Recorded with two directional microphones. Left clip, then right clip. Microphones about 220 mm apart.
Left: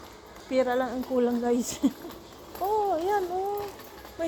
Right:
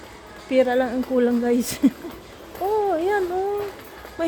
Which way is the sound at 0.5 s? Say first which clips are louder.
Right 6 dB; 25° right (ahead or behind).